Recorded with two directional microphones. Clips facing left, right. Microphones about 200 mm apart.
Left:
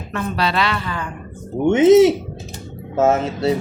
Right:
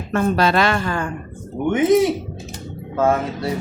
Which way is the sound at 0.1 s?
45° right (ahead or behind).